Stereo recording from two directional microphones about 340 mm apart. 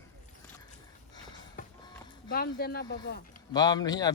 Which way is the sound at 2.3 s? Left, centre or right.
Left.